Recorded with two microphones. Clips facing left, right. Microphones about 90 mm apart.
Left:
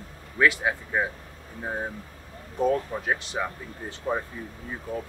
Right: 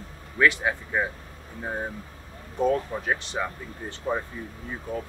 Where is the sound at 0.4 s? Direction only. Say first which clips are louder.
Even; 5° left (ahead or behind).